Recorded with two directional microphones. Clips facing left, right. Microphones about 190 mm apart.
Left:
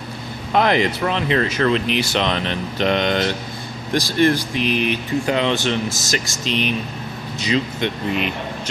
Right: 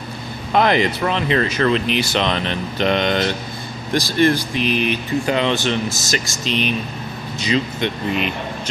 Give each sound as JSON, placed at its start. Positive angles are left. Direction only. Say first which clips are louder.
{"t": 0.5, "sound": "speech", "louder": "right 1 dB", "side_deg": 5}